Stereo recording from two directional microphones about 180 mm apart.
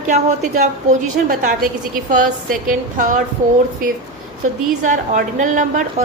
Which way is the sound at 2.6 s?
45° right (ahead or behind).